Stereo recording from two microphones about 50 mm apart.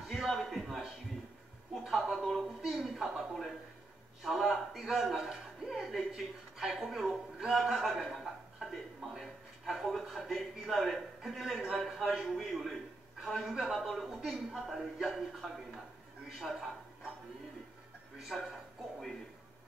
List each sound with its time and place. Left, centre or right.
0.1 s a sound: centre
1.9 s a man's voice: centre
2.4 s a woman's voice: centre
8.0 s a sound: centre
9.2 s a man's voice: centre
18.3 s speech: centre